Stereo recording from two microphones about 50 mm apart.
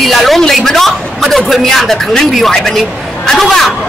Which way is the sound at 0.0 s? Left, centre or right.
Centre.